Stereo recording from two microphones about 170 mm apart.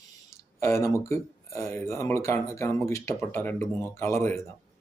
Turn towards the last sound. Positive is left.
turn(degrees=15)  # may be behind; listen again after turning